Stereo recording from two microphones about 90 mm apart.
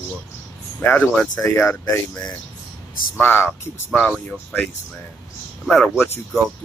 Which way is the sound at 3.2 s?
20° left (ahead or behind).